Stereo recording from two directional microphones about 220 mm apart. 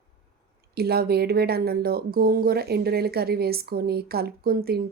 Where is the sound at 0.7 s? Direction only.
45° right (ahead or behind).